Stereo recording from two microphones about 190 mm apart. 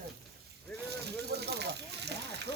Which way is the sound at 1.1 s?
60° right (ahead or behind).